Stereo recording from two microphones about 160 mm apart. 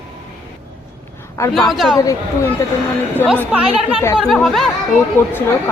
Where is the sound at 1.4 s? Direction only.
20° left (ahead or behind).